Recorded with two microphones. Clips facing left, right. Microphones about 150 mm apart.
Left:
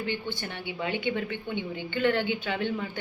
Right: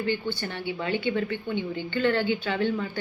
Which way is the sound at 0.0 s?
20° left (ahead or behind).